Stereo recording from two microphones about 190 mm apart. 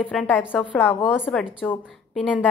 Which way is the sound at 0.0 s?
5° left (ahead or behind).